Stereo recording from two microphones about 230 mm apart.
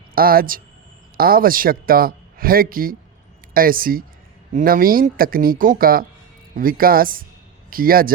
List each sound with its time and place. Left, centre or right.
0.1 s a man's voice: right